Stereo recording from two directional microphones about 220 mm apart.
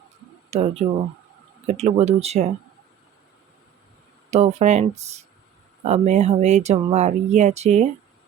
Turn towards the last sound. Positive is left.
turn(degrees=-30)  # may be behind; listen again after turning